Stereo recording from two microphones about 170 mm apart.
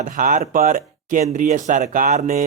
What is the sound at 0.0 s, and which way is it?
Speech, 50° right (ahead or behind).